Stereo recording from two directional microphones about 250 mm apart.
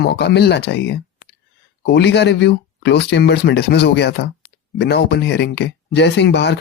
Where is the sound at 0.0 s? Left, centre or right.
Left.